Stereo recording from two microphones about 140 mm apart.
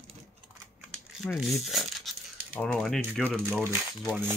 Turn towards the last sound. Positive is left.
turn(degrees=-10)  # may be behind; listen again after turning